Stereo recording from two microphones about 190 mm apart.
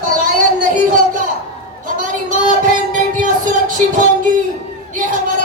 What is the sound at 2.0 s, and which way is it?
Child singing, 45° right (ahead or behind).